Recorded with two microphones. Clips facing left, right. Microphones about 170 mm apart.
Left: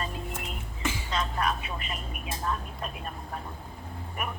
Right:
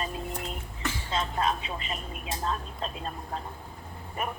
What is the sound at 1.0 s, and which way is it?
Speech, 25° right (ahead or behind).